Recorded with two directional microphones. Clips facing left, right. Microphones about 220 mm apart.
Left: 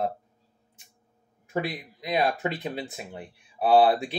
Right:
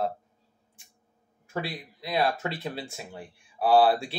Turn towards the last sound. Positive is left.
turn(degrees=20)  # may be behind; listen again after turning